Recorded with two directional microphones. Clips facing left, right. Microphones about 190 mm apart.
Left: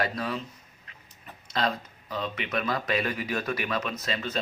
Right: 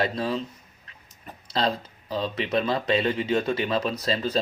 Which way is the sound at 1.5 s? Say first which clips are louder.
Right 3 dB; 30° right (ahead or behind).